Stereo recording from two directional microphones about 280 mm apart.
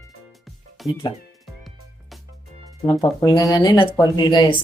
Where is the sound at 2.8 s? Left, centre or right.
Centre.